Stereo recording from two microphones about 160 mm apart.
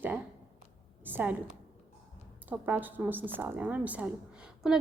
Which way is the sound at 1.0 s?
10° right (ahead or behind).